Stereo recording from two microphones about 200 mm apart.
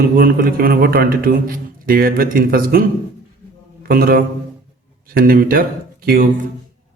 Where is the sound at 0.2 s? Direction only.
45° right (ahead or behind).